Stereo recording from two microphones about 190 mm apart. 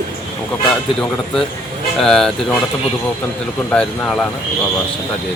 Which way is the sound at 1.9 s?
Centre (ahead or behind).